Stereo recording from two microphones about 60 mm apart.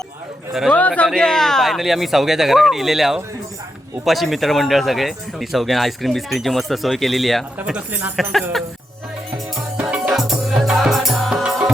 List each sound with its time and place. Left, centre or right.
0.7 s a man's voice: left
1.0 s speech: centre
10.6 s music: centre
11.4 s music: centre